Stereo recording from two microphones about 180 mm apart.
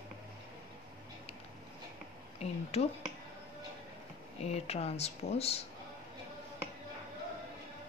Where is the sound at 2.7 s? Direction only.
35° left (ahead or behind).